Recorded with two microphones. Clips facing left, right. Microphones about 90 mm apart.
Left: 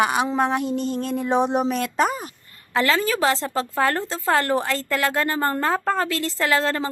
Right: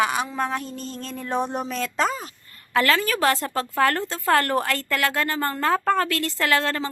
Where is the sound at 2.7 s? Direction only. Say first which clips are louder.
Even; 25° left (ahead or behind).